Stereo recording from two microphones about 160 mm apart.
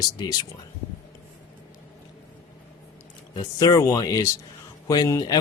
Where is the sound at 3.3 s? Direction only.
25° left (ahead or behind).